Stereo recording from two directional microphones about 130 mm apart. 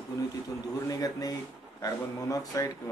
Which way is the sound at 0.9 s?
30° left (ahead or behind).